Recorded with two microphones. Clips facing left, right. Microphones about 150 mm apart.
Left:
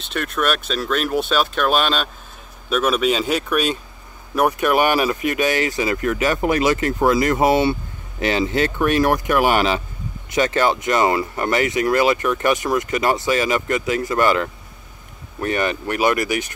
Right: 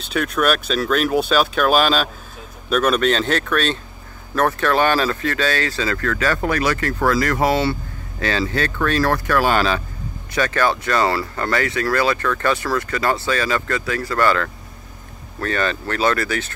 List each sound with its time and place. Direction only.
0.0 s speech: centre (ahead or behind); by 16.5 s 15° left (ahead or behind)